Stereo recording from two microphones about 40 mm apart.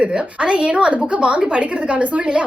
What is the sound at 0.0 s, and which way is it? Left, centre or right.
A woman's voice, right.